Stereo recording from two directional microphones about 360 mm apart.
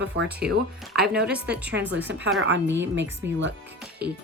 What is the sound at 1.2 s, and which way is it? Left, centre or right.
Speech, centre.